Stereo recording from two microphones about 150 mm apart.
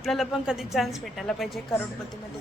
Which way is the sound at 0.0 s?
Centre (ahead or behind).